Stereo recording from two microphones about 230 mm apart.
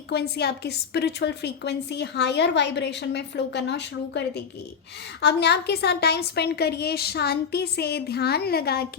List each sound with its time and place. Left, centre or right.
0.1 s a woman's voice: left